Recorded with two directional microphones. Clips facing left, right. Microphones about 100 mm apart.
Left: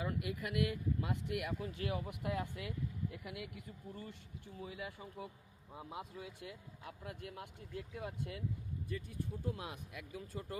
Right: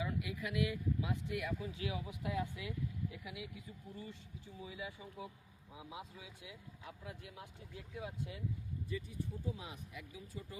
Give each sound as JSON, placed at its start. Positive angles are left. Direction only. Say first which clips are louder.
{"t": 0.0, "sound": "speech", "louder": "left 1 dB", "side_deg": 55}